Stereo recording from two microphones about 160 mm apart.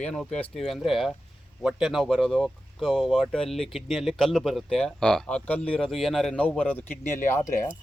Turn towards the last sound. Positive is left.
turn(degrees=15)  # may be behind; listen again after turning